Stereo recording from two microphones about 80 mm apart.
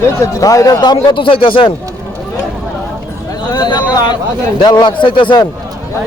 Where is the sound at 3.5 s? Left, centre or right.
Left.